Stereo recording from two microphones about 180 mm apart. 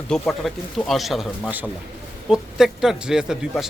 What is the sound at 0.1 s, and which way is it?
Speech, centre (ahead or behind).